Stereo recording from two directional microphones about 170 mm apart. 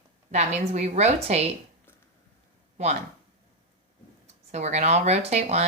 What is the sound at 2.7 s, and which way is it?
Speech, 40° right (ahead or behind).